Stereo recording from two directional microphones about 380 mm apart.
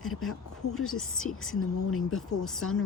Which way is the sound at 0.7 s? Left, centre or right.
Left.